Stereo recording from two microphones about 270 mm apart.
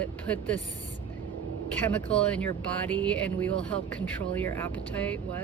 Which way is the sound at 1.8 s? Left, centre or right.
Centre.